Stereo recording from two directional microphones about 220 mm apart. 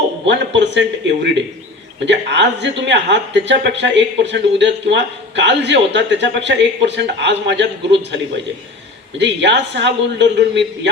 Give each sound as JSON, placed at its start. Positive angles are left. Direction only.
{"t": 0.3, "sound": "speech", "side_deg": -55}